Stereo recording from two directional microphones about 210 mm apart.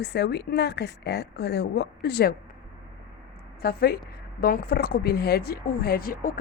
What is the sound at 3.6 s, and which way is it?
A man's voice, 45° left (ahead or behind).